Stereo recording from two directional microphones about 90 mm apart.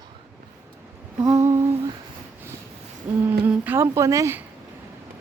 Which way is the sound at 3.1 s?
15° right (ahead or behind).